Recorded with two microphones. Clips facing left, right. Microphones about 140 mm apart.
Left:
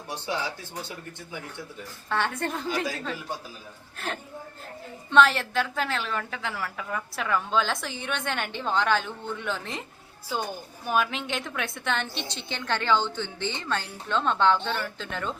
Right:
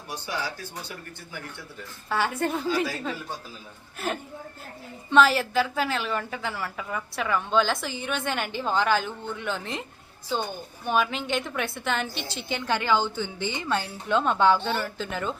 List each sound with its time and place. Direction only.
0.1 s speech: 25° left (ahead or behind)
2.0 s a woman's voice: 5° right (ahead or behind)
3.9 s a woman's voice: 5° right (ahead or behind)
10.8 s a woman's voice: centre (ahead or behind)